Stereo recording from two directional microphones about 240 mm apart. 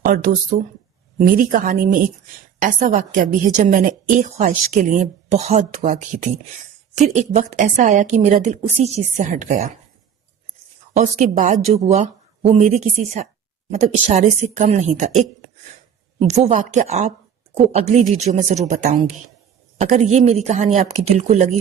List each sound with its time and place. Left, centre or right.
0.1 s a woman's voice: right
10.9 s a woman's voice: right
16.2 s a woman's voice: right